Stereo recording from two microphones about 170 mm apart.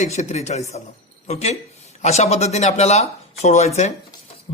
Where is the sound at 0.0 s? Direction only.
40° left (ahead or behind).